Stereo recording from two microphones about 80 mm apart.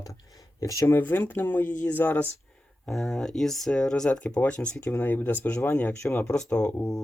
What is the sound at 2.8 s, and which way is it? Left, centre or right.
Speech, centre.